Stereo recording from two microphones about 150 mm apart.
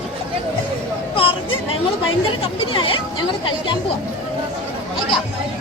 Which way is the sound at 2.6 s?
35° left (ahead or behind).